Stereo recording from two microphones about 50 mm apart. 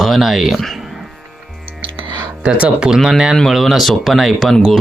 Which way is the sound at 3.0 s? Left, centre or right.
Centre.